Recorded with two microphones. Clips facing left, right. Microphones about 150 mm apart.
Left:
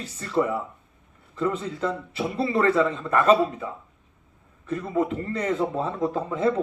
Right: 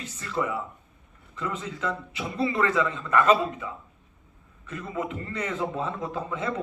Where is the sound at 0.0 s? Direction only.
35° left (ahead or behind).